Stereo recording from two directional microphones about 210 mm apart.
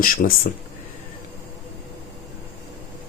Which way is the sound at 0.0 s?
45° left (ahead or behind).